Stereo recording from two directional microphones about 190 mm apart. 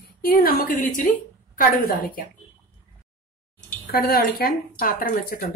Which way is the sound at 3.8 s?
50° left (ahead or behind).